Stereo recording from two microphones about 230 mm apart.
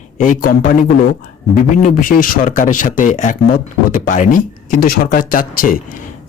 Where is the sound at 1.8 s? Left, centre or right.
Left.